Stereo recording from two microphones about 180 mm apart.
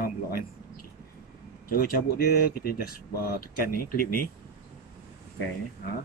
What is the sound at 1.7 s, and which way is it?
Speech, 55° left (ahead or behind).